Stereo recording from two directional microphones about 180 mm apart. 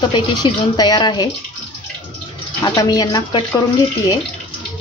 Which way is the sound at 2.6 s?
20° left (ahead or behind).